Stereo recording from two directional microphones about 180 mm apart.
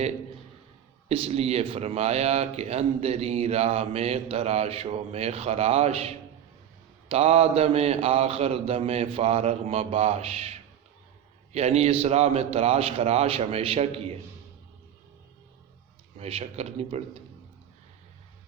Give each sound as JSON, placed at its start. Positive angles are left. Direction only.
{"t": 1.0, "sound": "speech", "side_deg": -35}
{"t": 16.1, "sound": "speech", "side_deg": -35}